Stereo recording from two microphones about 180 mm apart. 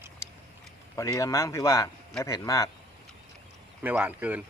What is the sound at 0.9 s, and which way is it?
A man's voice, 20° left (ahead or behind).